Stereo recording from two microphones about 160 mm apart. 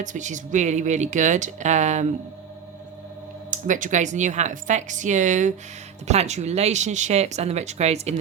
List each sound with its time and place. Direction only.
0.0 s speech: 50° right (ahead or behind)
3.5 s speech: 55° right (ahead or behind)